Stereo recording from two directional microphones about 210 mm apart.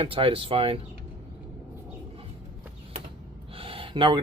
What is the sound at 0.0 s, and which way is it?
Speech, 25° right (ahead or behind).